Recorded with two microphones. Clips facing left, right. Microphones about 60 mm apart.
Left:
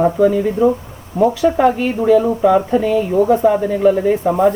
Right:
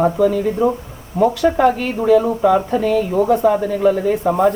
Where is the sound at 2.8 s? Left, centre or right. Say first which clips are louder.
Left 2 dB; centre.